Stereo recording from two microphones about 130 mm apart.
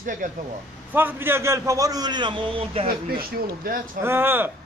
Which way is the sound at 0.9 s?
15° right (ahead or behind).